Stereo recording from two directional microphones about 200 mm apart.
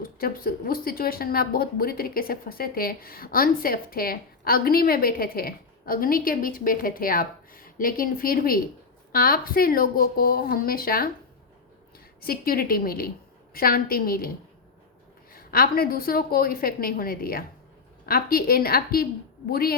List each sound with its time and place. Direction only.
0.0 s speech: 45° left (ahead or behind)
12.2 s speech: 50° left (ahead or behind)